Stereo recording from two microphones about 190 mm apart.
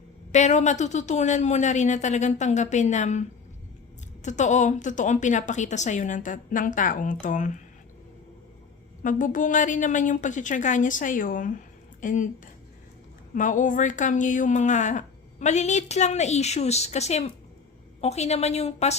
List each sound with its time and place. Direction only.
0.3 s speech: 40° left (ahead or behind)
9.0 s a woman's voice: 45° left (ahead or behind)
13.3 s speech: 45° left (ahead or behind)